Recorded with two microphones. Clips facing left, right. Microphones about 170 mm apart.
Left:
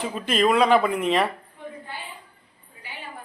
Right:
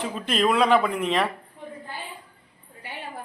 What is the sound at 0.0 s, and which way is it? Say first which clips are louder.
Speech: left 2 dB; centre (ahead or behind).